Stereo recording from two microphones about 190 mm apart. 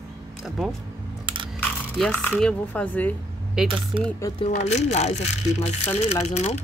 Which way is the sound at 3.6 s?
5° right (ahead or behind).